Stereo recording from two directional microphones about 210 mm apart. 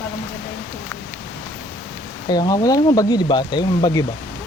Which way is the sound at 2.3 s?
20° left (ahead or behind).